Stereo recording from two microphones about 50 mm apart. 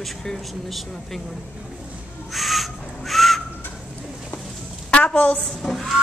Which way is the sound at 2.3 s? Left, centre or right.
Centre.